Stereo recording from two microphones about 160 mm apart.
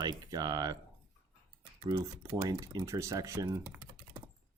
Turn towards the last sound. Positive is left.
turn(degrees=-20)  # may be behind; listen again after turning